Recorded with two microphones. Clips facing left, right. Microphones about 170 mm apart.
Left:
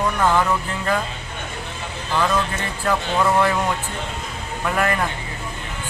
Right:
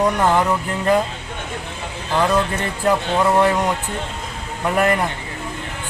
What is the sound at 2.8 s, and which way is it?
Speech, 15° right (ahead or behind).